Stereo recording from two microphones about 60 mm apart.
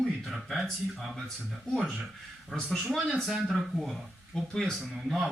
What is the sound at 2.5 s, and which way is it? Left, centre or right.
Speech, centre.